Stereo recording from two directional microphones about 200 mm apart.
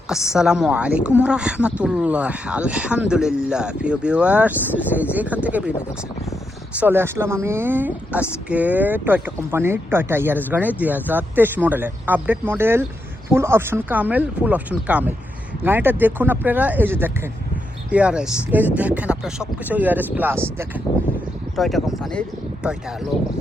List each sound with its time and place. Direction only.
0.3 s speech: 5° right (ahead or behind)
6.7 s speech: 10° right (ahead or behind)
21.5 s speech: centre (ahead or behind)